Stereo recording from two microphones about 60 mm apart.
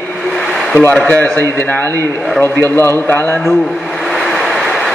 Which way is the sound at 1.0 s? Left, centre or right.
Left.